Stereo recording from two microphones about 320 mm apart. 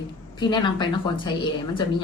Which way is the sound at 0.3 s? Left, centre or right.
Centre.